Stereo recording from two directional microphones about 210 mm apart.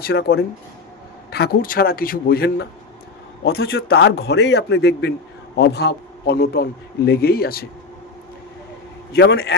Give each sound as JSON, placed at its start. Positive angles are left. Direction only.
{"t": 0.0, "sound": "a man's voice", "side_deg": 50}
{"t": 3.6, "sound": "a man's voice", "side_deg": 65}
{"t": 9.1, "sound": "a man's voice", "side_deg": 50}